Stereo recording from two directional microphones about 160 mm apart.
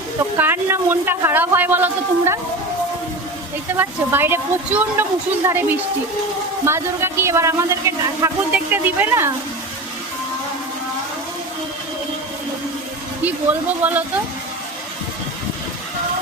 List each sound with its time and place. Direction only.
0.2 s speech: 15° right (ahead or behind)
3.7 s speech: 15° right (ahead or behind)
13.2 s speech: 10° right (ahead or behind)